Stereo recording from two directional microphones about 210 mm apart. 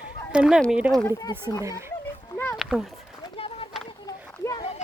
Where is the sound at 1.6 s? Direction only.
15° right (ahead or behind).